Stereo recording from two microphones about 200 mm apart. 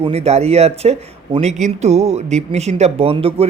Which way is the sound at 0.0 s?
30° right (ahead or behind).